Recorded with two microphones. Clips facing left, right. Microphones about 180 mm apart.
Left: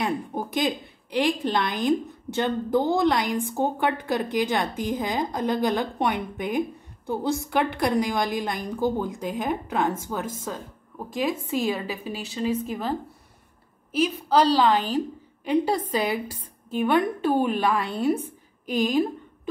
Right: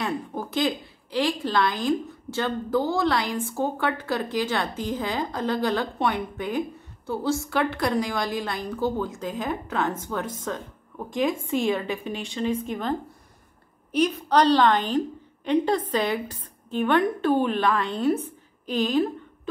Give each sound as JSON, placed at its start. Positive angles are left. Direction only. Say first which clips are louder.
{"t": 0.0, "sound": "a woman's voice", "louder": "left 2 dB", "side_deg": 15}
{"t": 13.9, "sound": "a woman's voice", "louder": "even", "side_deg": 5}